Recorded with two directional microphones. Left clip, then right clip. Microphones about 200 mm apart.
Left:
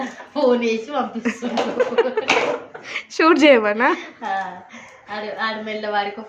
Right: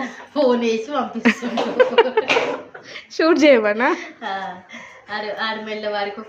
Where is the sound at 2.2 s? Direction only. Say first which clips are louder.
Right 1 dB; 20° right (ahead or behind).